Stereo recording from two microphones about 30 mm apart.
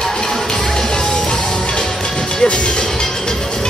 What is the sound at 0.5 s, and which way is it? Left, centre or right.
Music, centre.